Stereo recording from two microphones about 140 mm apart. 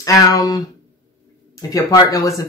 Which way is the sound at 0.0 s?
25° left (ahead or behind).